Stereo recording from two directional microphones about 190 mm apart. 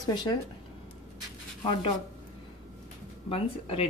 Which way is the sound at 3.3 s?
30° left (ahead or behind).